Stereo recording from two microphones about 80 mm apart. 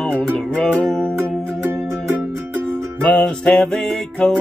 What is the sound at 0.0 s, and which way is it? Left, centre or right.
Music, centre.